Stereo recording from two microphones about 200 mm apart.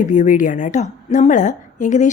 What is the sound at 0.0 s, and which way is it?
A woman's voice, 40° left (ahead or behind).